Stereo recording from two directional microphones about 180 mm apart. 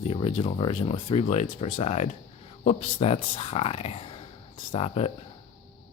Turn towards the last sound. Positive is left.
turn(degrees=35)  # may be behind; listen again after turning